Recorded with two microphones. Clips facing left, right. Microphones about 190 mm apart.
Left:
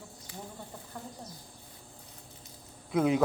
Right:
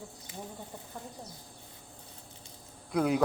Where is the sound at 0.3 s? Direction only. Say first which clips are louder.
Right 1 dB; 20° right (ahead or behind).